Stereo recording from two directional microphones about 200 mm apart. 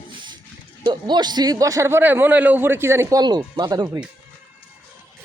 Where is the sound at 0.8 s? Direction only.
20° right (ahead or behind).